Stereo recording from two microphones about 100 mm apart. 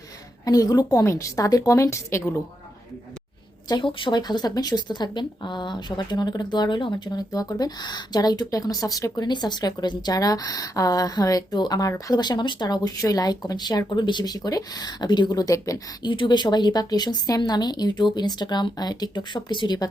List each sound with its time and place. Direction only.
0.4 s a woman's voice: 40° left (ahead or behind)
3.7 s a woman's voice: 50° left (ahead or behind); by 15.8 s 35° left (ahead or behind)
16.0 s speech: 55° left (ahead or behind)